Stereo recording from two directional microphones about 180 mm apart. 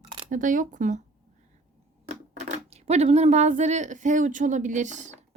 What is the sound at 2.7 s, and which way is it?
Speech, 35° right (ahead or behind).